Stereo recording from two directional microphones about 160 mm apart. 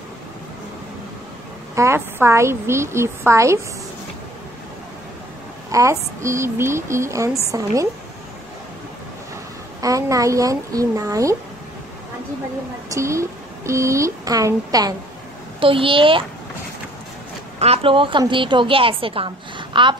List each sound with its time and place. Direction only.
1.8 s a woman's voice: 15° right (ahead or behind)
5.7 s a woman's voice: 20° right (ahead or behind)
9.8 s speech: 20° right (ahead or behind)
12.9 s speech: 20° right (ahead or behind)
15.6 s a woman's voice: 35° right (ahead or behind)
17.6 s a woman's voice: 35° right (ahead or behind)